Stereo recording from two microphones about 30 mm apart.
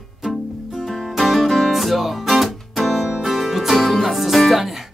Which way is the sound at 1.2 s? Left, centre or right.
Centre.